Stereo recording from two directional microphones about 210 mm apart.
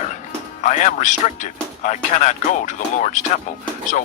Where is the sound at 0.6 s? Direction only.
35° left (ahead or behind).